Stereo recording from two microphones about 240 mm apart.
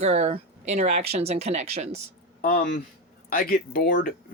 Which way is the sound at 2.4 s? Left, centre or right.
Left.